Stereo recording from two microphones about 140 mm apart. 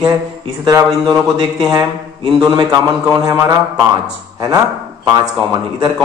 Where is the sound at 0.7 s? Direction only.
25° right (ahead or behind).